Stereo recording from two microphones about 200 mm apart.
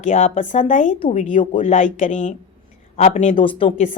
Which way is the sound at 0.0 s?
35° left (ahead or behind).